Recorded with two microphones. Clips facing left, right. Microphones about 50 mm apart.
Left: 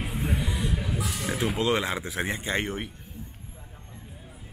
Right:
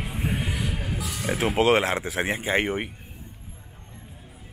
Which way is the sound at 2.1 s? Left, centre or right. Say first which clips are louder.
Right 4 dB; centre.